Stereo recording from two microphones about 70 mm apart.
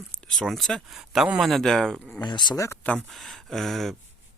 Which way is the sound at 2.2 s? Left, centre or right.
Left.